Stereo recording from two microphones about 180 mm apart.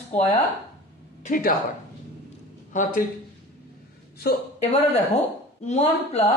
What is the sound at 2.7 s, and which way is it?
Speech, 45° left (ahead or behind).